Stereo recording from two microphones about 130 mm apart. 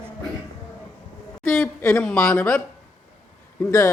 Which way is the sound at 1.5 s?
Centre (ahead or behind).